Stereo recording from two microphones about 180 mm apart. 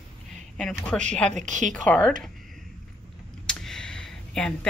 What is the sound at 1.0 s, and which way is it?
Speech, 5° left (ahead or behind).